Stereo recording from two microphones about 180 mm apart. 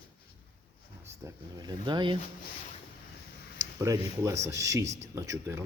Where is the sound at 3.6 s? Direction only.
20° right (ahead or behind).